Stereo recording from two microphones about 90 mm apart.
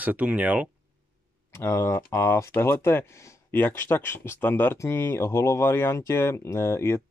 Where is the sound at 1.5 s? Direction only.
30° left (ahead or behind).